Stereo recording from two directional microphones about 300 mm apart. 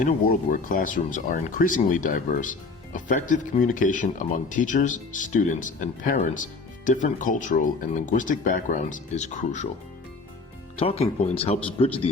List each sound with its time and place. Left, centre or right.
0.0 s speech: left
10.8 s speech: centre